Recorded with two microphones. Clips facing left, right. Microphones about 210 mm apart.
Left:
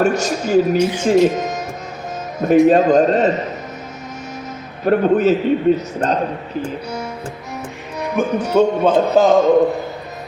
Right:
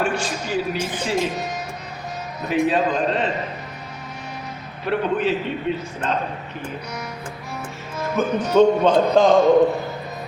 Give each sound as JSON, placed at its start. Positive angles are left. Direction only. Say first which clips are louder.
{"t": 0.0, "sound": "a man's voice", "louder": "left 7 dB", "side_deg": 45}
{"t": 4.9, "sound": "a man's voice", "louder": "left 8 dB", "side_deg": 45}
{"t": 7.9, "sound": "speech", "louder": "left 3 dB", "side_deg": 15}